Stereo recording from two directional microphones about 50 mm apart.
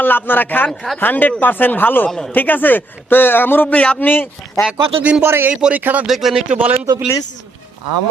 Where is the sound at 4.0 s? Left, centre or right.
Left.